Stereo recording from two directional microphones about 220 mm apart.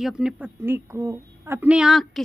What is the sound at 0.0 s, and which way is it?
A woman's voice, 5° right (ahead or behind).